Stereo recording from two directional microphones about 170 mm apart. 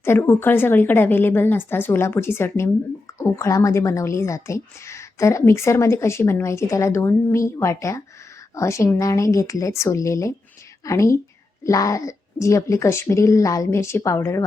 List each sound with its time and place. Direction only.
0.0 s a woman's voice: 15° left (ahead or behind)